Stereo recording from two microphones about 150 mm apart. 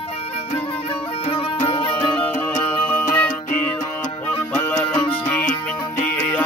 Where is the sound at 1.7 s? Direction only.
35° left (ahead or behind).